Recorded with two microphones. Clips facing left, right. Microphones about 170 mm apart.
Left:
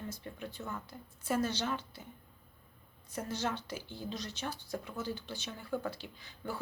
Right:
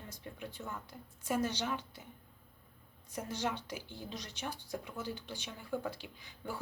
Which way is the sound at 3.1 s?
15° right (ahead or behind).